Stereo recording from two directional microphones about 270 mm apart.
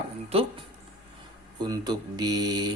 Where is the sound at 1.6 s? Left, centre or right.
Centre.